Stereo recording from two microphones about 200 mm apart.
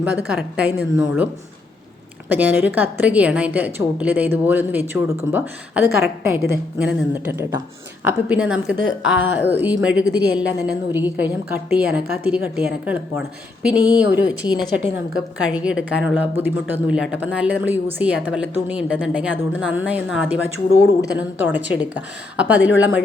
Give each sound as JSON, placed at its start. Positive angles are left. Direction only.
{"t": 0.0, "sound": "a woman's voice", "side_deg": -5}
{"t": 2.3, "sound": "a woman's voice", "side_deg": -10}
{"t": 10.0, "sound": "a woman's voice", "side_deg": -55}
{"t": 10.3, "sound": "a woman's voice", "side_deg": -10}
{"t": 15.4, "sound": "a woman's voice", "side_deg": -5}